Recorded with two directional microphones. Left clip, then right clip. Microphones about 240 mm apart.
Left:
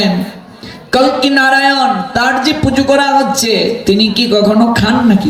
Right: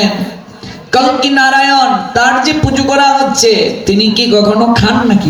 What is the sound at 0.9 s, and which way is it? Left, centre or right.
Speech, left.